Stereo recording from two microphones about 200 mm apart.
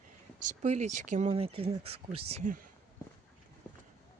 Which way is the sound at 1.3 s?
30° right (ahead or behind).